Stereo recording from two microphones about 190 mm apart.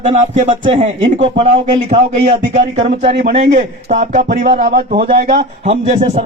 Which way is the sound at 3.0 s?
35° right (ahead or behind).